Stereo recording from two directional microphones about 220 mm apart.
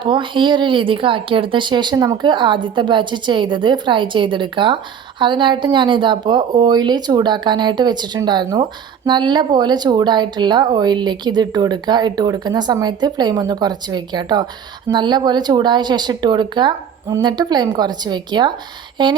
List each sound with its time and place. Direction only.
0.0 s speech: 20° right (ahead or behind)